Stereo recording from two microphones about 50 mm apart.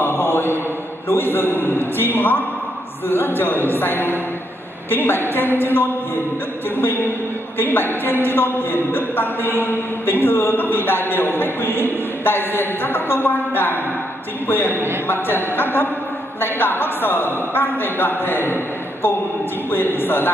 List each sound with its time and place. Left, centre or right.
0.0 s mantra: left
1.0 s a man's voice: left
19.7 s a man's voice: left